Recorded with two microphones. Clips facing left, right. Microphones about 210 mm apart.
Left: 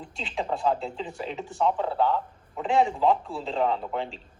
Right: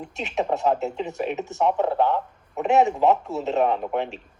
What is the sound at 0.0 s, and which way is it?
A man's voice, 25° right (ahead or behind).